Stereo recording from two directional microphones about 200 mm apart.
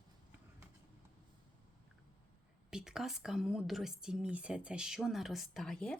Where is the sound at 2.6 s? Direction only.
5° right (ahead or behind).